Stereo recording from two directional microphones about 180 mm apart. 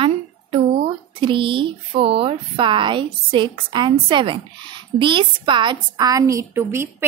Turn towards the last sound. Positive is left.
turn(degrees=-15)  # may be behind; listen again after turning